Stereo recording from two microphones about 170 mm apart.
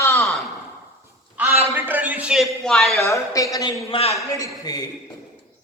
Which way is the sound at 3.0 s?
20° left (ahead or behind).